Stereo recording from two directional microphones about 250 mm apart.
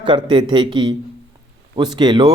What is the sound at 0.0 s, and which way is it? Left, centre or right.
A man's voice, centre.